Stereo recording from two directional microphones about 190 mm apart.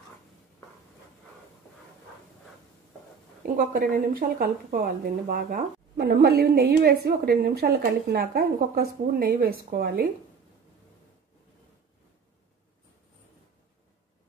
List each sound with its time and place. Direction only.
3.4 s a woman's voice: 50° right (ahead or behind)